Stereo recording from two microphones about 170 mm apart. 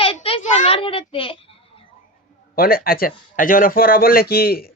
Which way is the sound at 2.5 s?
60° left (ahead or behind).